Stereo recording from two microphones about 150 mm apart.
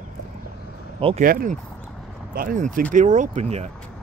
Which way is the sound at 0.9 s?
40° right (ahead or behind).